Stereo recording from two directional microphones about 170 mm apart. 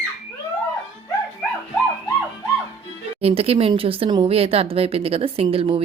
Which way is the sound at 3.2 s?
35° right (ahead or behind).